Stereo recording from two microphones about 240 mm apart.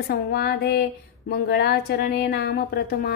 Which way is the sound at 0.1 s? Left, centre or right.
Left.